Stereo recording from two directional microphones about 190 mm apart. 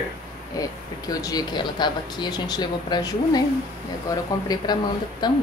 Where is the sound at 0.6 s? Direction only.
20° left (ahead or behind).